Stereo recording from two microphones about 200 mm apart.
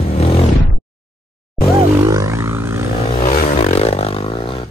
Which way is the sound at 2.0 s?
15° right (ahead or behind).